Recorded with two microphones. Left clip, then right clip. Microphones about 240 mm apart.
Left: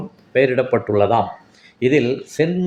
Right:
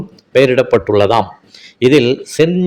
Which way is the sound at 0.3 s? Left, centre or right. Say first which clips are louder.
Right 6 dB; right.